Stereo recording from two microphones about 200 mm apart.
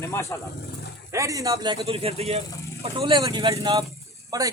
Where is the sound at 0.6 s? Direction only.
50° left (ahead or behind).